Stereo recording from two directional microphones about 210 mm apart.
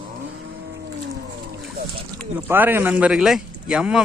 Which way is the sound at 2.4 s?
10° right (ahead or behind).